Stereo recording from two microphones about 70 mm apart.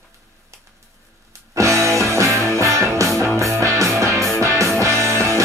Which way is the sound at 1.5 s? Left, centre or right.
Right.